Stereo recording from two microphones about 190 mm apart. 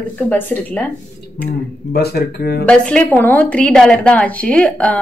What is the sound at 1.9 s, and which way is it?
Speech, 55° left (ahead or behind).